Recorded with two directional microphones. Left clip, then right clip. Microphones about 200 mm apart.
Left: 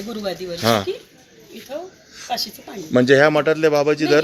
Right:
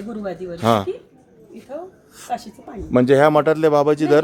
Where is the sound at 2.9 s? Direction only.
5° right (ahead or behind).